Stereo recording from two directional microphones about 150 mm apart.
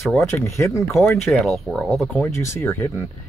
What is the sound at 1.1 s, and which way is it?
Speech, centre (ahead or behind).